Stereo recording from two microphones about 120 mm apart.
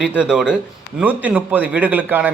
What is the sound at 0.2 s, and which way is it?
Speech, 5° right (ahead or behind).